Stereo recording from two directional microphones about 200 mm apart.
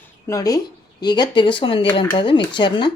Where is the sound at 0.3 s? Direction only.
20° left (ahead or behind).